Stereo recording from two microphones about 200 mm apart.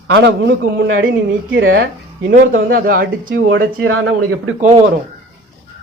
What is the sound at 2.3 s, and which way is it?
A man's voice, 45° right (ahead or behind).